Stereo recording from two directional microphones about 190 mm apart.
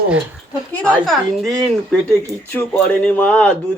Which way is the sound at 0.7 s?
5° left (ahead or behind).